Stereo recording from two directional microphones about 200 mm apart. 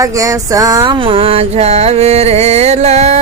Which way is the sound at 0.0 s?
15° right (ahead or behind).